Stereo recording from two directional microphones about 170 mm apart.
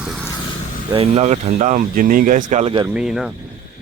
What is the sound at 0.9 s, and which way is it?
Speech, 35° right (ahead or behind).